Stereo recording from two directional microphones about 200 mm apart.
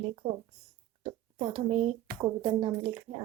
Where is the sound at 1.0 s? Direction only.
25° right (ahead or behind).